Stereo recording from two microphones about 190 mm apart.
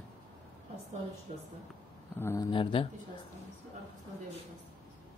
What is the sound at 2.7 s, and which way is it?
Speech, 25° left (ahead or behind).